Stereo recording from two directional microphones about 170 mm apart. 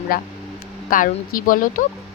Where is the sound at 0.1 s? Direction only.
60° left (ahead or behind).